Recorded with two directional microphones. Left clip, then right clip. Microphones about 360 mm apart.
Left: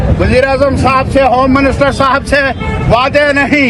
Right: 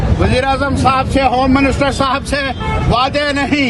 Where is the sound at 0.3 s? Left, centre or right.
Centre.